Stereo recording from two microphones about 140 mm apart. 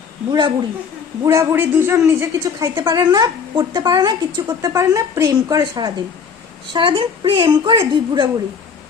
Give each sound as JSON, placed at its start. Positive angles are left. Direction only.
{"t": 0.3, "sound": "a woman's voice", "side_deg": -35}
{"t": 1.2, "sound": "a woman's voice", "side_deg": -20}